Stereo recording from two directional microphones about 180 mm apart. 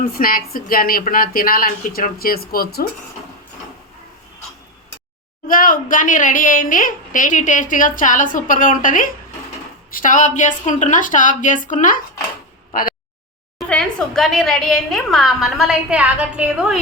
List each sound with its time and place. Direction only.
0.0 s a woman's voice: 50° left (ahead or behind)
5.5 s a woman's voice: 50° left (ahead or behind)
13.6 s a woman's voice: 5° left (ahead or behind)